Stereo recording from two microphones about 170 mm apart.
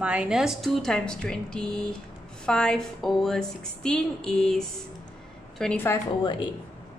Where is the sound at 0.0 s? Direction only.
5° right (ahead or behind); by 5.9 s 10° left (ahead or behind).